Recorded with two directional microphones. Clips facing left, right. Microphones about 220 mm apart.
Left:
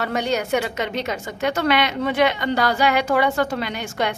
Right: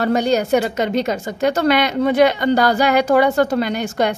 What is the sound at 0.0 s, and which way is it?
A woman's voice, 40° right (ahead or behind).